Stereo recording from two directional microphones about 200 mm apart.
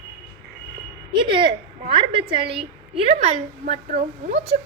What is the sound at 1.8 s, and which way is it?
A woman's voice, 25° right (ahead or behind).